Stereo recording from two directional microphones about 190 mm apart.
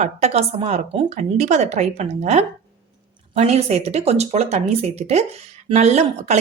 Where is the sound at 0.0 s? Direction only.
35° right (ahead or behind).